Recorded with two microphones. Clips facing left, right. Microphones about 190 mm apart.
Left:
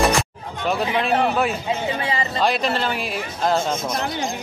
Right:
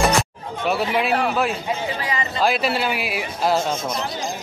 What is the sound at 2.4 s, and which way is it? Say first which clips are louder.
Speech: right 1 dB; 5° right (ahead or behind).